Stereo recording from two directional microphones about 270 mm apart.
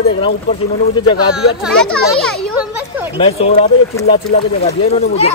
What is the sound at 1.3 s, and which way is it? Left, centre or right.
Speech, centre.